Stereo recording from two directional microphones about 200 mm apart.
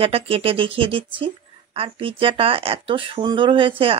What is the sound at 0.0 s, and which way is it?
Speech, 30° right (ahead or behind).